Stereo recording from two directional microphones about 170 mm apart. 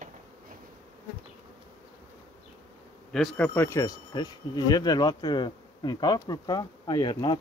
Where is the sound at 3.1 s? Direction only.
5° left (ahead or behind).